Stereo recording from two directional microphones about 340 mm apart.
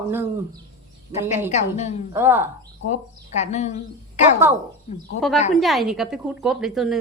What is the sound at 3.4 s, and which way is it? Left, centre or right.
Speech, centre.